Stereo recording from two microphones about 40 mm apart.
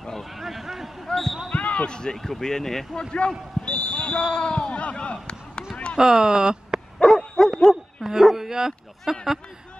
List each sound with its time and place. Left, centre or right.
0.0 s a sound: centre
0.3 s a sound: centre
1.0 s basketball bounce: centre
1.5 s basketball bounce: left
1.9 s speech: left
2.1 s speech: centre
3.1 s speech: left
5.9 s speech: centre
7.0 s dog: centre
9.1 s speech: centre